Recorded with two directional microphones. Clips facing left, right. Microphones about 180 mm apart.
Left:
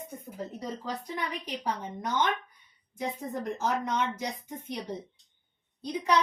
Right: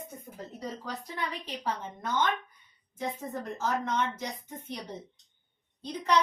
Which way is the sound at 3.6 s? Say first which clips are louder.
Even; 15° left (ahead or behind).